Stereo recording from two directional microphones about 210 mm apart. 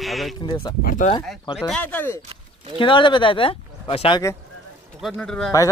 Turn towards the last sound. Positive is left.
turn(degrees=5)  # may be behind; listen again after turning